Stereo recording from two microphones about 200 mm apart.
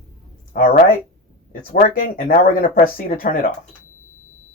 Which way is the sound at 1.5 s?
45° left (ahead or behind).